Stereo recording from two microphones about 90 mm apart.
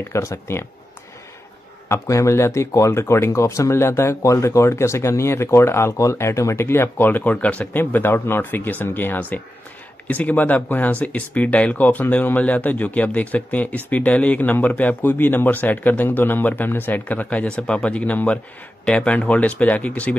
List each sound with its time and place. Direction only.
0.1 s speech: 30° left (ahead or behind)
1.9 s speech: 35° left (ahead or behind); by 20.2 s 15° left (ahead or behind)